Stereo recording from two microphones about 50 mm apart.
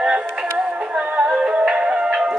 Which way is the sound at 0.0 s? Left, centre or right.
Centre.